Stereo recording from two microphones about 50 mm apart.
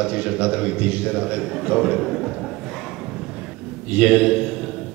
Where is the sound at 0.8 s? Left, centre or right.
Right.